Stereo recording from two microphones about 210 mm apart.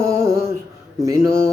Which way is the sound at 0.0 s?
15° right (ahead or behind).